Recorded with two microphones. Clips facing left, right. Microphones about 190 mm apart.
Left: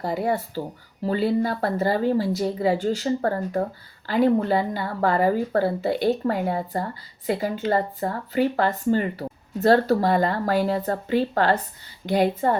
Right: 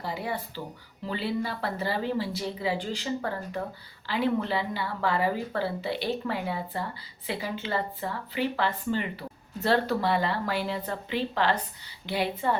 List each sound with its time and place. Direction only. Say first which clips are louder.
0.0 s speech: left 8 dB; 45° left (ahead or behind)